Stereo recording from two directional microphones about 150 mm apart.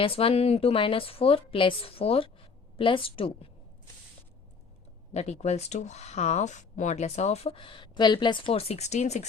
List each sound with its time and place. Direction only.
0.0 s a woman's voice: 40° left (ahead or behind)
5.1 s speech: 45° left (ahead or behind)